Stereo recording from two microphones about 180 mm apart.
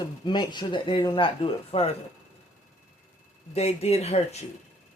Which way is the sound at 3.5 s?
35° left (ahead or behind).